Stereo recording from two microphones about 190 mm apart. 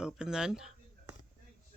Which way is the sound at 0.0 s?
5° right (ahead or behind).